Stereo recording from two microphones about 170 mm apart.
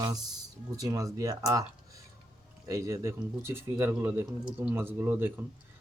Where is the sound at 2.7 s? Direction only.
15° right (ahead or behind).